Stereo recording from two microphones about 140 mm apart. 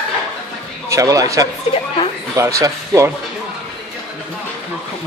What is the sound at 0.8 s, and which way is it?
Speech, 25° right (ahead or behind).